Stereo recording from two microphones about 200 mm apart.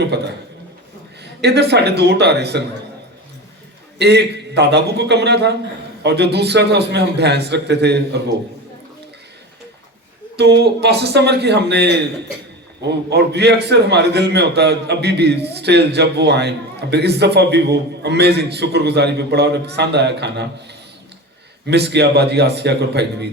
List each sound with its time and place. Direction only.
1.2 s a man's voice: 55° right (ahead or behind)
3.9 s a man's voice: 55° right (ahead or behind)
10.3 s a man's voice: 55° right (ahead or behind)
21.7 s a man's voice: 55° right (ahead or behind)